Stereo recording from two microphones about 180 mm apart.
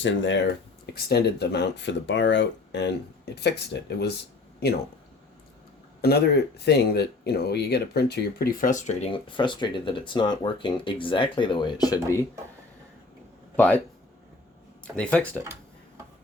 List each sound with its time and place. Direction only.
0.0 s speech: 90° left
0.9 s speech: 60° left (ahead or behind)
6.0 s speech: 60° left (ahead or behind); by 12.2 s 20° left (ahead or behind)
14.8 s speech: 5° left (ahead or behind)